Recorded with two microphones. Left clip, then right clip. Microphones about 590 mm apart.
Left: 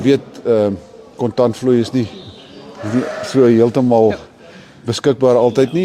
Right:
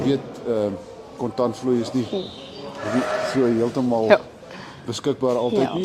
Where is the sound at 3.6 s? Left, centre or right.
Left.